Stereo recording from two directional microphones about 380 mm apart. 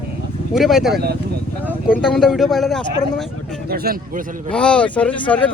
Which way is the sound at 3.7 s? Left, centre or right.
Right.